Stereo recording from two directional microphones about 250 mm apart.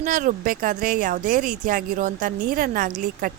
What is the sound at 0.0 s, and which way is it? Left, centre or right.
Speech, right.